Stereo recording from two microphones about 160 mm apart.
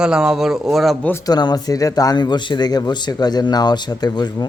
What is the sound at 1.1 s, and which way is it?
Speech, 20° left (ahead or behind).